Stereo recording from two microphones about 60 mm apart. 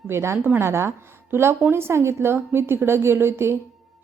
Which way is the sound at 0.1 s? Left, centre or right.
Right.